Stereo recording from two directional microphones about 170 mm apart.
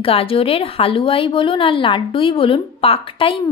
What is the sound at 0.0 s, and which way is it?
A woman's voice, 35° left (ahead or behind).